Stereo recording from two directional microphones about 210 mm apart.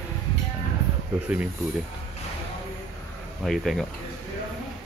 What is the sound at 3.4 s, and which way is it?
Speech, centre (ahead or behind).